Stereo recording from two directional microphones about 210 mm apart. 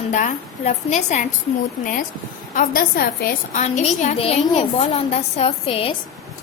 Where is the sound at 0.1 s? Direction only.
35° left (ahead or behind).